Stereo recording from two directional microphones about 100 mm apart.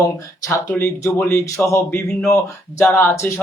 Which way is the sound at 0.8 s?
25° left (ahead or behind).